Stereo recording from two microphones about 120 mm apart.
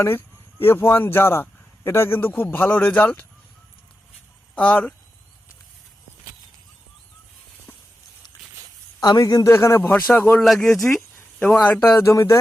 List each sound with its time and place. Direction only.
0.0 s a man's voice: 20° left (ahead or behind)
4.5 s speech: 10° left (ahead or behind)
9.0 s a man's voice: 30° left (ahead or behind); by 10.4 s 15° left (ahead or behind)
10.4 s speech: centre (ahead or behind)
11.6 s speech: 15° left (ahead or behind)
11.9 s a man's voice: 25° left (ahead or behind)